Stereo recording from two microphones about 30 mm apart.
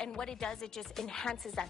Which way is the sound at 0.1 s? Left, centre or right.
Left.